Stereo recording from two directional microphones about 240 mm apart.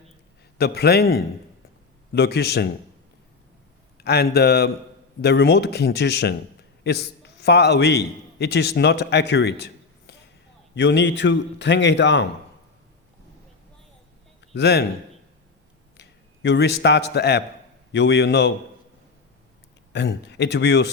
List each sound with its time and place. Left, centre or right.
0.6 s a man's voice: left
3.9 s a man's voice: left
14.5 s a man's voice: left
16.0 s a man's voice: left
19.9 s a man's voice: left